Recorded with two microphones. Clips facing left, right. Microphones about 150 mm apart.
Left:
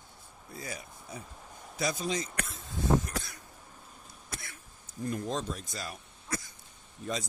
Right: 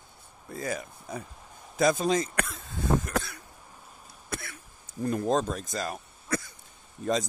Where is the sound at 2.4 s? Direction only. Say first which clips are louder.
Right 2 dB; 55° right (ahead or behind).